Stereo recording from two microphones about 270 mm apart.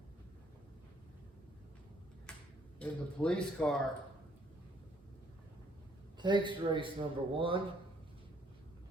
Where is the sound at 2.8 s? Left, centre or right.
Centre.